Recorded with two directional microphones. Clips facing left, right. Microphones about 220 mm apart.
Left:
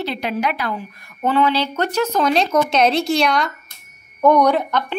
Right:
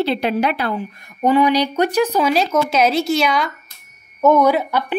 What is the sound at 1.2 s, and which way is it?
A woman's voice, 15° right (ahead or behind).